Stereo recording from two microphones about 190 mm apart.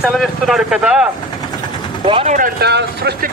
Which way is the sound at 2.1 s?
30° right (ahead or behind).